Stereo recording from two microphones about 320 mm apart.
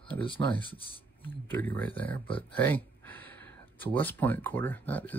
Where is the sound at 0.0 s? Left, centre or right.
Centre.